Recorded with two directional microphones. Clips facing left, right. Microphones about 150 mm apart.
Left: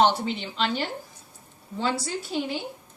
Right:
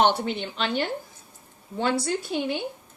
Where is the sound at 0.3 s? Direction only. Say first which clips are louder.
Even; 55° right (ahead or behind).